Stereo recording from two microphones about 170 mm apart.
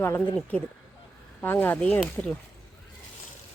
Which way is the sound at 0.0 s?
15° left (ahead or behind).